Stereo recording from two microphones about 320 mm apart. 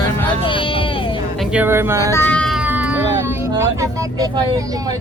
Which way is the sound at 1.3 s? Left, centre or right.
Centre.